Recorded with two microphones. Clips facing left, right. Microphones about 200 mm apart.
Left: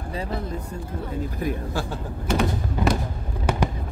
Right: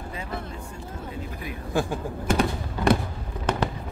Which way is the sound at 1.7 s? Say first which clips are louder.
Right 3 dB; 20° right (ahead or behind).